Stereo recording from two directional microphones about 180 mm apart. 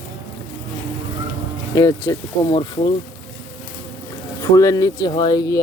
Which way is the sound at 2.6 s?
30° left (ahead or behind).